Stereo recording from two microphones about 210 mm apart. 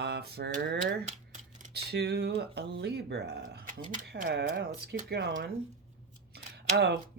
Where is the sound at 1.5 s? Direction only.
45° right (ahead or behind).